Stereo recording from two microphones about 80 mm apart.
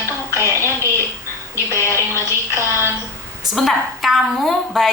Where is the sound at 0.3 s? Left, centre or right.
Right.